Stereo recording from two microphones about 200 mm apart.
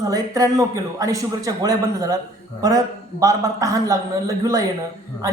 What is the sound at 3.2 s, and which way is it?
Speech, 15° right (ahead or behind).